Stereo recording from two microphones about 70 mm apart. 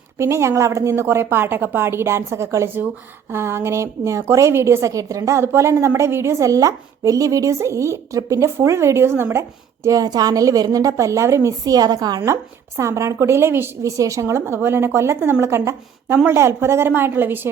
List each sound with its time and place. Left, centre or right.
0.2 s a woman's voice: right
1.0 s a woman's voice: right
5.4 s a woman's voice: right
6.4 s a woman's voice: right
10.0 s a woman's voice: right
11.6 s a woman's voice: right
12.2 s a woman's voice: right
13.8 s speech: right
14.4 s a woman's voice: right